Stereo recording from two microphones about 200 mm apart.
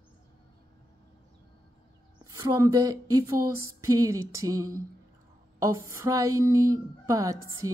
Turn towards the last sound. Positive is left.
turn(degrees=-15)  # may be behind; listen again after turning